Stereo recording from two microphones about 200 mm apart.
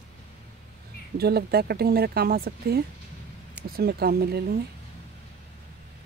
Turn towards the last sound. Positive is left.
turn(degrees=-50)  # may be behind; listen again after turning